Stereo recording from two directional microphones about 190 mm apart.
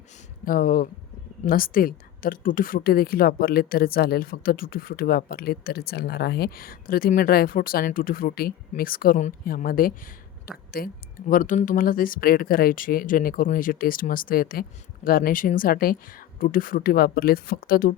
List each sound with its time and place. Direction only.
0.4 s a woman's voice: 50° left (ahead or behind)